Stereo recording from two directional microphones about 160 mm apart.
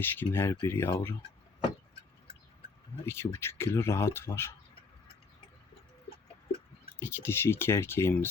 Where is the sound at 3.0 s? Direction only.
15° left (ahead or behind).